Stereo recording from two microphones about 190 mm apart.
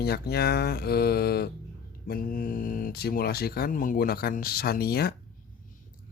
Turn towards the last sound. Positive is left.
turn(degrees=55)  # may be behind; listen again after turning